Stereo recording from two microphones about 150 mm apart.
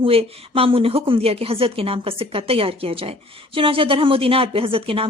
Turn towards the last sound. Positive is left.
turn(degrees=-40)  # may be behind; listen again after turning